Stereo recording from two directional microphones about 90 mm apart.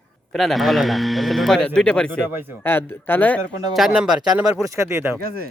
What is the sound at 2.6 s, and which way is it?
Speech, 25° left (ahead or behind).